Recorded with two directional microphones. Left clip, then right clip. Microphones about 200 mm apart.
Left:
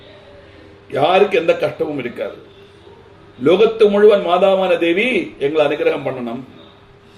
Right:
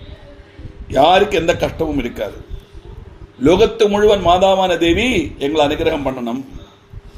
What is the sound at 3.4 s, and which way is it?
A man's voice, 50° right (ahead or behind).